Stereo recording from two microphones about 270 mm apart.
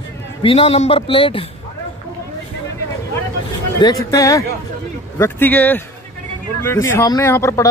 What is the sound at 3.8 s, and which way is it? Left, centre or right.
Speech, centre.